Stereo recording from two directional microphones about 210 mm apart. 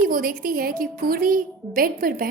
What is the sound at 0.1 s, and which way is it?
A woman's voice, 45° right (ahead or behind).